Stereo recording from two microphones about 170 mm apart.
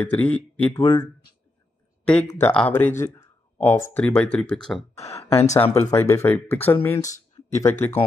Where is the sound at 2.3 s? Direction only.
10° left (ahead or behind).